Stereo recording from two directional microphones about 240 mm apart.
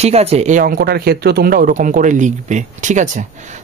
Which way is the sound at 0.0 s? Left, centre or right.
Right.